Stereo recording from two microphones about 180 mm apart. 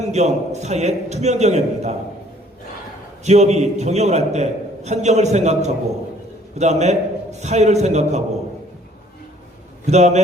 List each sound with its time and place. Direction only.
0.0 s a man's voice: 40° right (ahead or behind)
3.2 s a man's voice: 40° right (ahead or behind)
9.8 s a man's voice: 40° right (ahead or behind)